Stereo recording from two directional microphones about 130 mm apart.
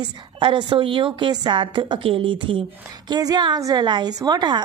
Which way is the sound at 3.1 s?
30° right (ahead or behind).